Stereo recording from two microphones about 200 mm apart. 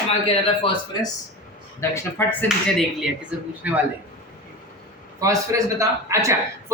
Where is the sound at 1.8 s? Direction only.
10° left (ahead or behind).